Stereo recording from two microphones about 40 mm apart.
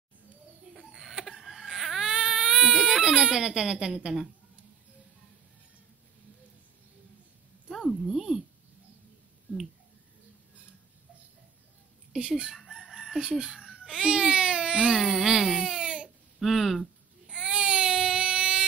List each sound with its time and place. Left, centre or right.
0.7 s a sound: centre
1.2 s baby cry: centre
8.0 s a sound: centre
12.2 s speech: right
12.5 s chicken: centre
13.2 s speech: centre
16.3 s speech: centre
17.3 s baby cry: centre